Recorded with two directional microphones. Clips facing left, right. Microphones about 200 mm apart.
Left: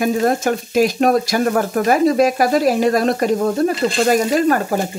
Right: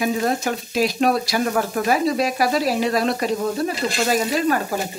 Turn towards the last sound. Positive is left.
turn(degrees=50)  # may be behind; listen again after turning